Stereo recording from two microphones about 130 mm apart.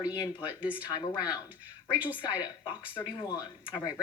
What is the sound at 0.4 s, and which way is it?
Speech, 10° right (ahead or behind).